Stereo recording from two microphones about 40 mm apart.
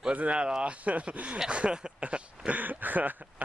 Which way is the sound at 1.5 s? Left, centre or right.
Right.